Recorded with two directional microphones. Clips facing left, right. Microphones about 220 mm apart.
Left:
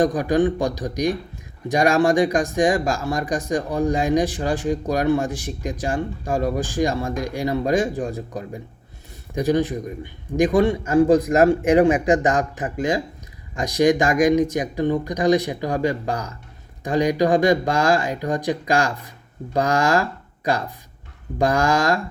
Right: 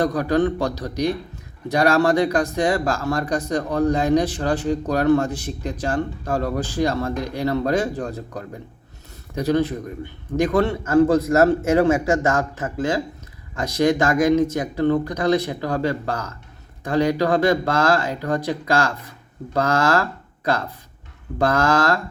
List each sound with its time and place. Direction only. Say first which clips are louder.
0.0 s speech: left 1 dB; 15° left (ahead or behind)